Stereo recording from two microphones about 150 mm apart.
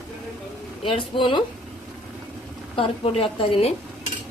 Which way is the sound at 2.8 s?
40° left (ahead or behind).